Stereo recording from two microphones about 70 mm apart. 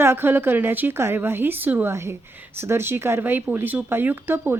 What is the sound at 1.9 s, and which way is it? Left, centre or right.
Speech, right.